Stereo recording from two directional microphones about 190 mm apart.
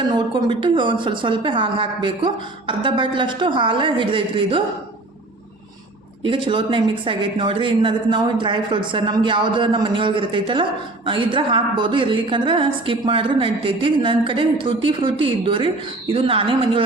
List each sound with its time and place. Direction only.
0.1 s speech: 25° right (ahead or behind)
6.2 s speech: 25° right (ahead or behind)